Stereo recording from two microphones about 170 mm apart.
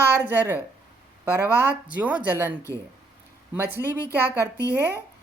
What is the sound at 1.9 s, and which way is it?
Speech, 10° right (ahead or behind).